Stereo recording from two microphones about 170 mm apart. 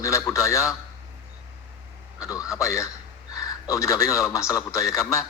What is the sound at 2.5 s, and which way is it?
A man's voice, 15° left (ahead or behind).